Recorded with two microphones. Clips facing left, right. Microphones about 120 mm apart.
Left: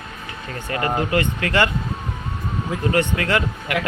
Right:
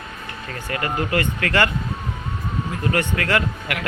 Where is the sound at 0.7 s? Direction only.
25° left (ahead or behind).